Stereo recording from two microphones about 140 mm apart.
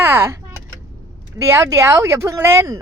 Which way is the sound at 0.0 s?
20° right (ahead or behind).